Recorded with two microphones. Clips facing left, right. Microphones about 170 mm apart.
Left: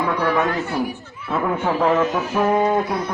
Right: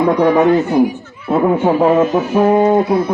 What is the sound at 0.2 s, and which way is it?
Speech, 15° right (ahead or behind).